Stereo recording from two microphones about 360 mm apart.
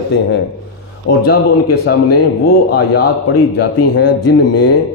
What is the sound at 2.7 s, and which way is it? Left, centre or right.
Speech, left.